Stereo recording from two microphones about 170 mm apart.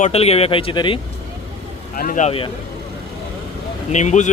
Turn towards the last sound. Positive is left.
turn(degrees=45)  # may be behind; listen again after turning